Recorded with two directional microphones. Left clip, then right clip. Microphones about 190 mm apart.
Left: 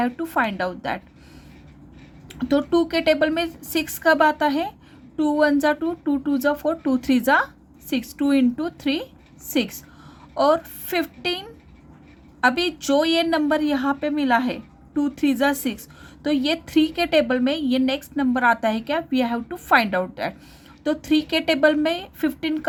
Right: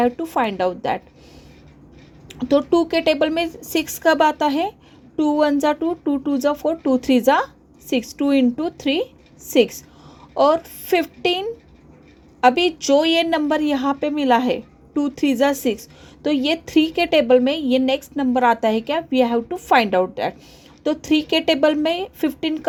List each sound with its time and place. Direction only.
0.0 s a woman's voice: 20° right (ahead or behind)
2.4 s a woman's voice: 15° right (ahead or behind)